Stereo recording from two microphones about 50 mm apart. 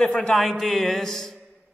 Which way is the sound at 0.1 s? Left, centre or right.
Centre.